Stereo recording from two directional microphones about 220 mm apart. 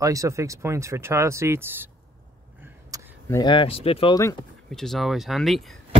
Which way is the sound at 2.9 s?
15° right (ahead or behind).